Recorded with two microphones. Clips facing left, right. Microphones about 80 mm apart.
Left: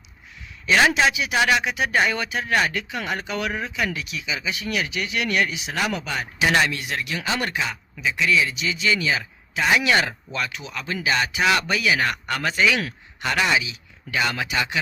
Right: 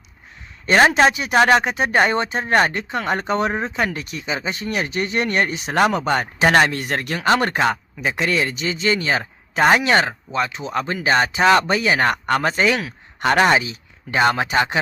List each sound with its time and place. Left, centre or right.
0.6 s speech: right
7.6 s speech: right
10.7 s speech: right